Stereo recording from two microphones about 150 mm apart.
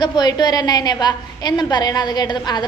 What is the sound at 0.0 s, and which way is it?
A woman's voice, 30° left (ahead or behind).